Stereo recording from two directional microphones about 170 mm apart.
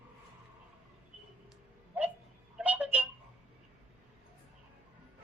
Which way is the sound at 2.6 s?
10° right (ahead or behind).